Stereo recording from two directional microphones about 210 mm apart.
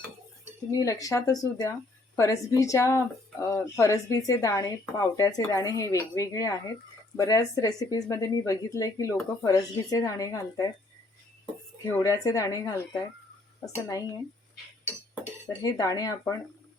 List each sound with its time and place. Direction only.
0.7 s speech: 15° left (ahead or behind)
11.9 s speech: 15° left (ahead or behind)
13.8 s speech: 15° left (ahead or behind)
15.4 s speech: 15° left (ahead or behind)